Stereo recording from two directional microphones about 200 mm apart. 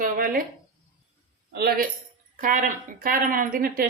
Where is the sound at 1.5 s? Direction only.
50° right (ahead or behind).